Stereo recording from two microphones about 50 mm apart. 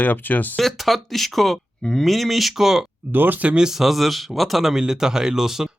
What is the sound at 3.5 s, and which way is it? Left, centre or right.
Speech, centre.